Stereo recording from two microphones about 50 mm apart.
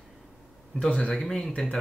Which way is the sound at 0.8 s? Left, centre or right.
Centre.